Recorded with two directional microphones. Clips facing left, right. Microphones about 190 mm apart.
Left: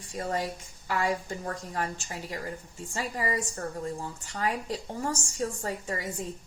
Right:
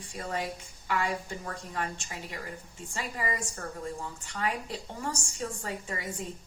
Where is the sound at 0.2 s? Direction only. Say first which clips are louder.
Left 3 dB; 40° left (ahead or behind).